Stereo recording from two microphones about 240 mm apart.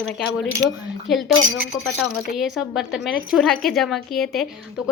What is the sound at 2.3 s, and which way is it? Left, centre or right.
A woman's voice, centre.